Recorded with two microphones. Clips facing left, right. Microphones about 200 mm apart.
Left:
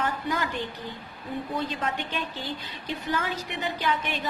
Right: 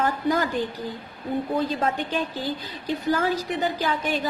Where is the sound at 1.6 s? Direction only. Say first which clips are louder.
Right 5 dB; 35° right (ahead or behind).